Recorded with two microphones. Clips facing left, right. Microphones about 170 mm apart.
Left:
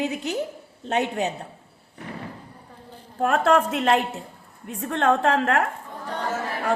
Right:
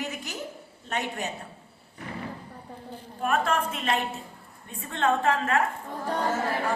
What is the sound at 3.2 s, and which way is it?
A woman's voice, 75° left (ahead or behind).